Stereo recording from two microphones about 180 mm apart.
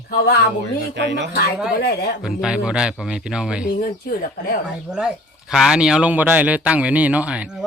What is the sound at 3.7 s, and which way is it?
Speech, 55° left (ahead or behind).